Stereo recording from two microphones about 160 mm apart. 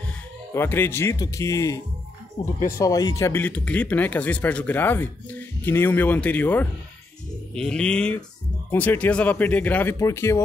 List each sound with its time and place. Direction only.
0.6 s speech: 15° left (ahead or behind)
2.8 s speech: 20° left (ahead or behind)